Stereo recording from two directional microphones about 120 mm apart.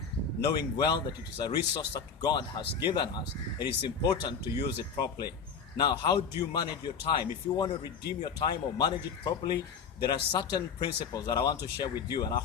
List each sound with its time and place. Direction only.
0.4 s speech: 35° left (ahead or behind)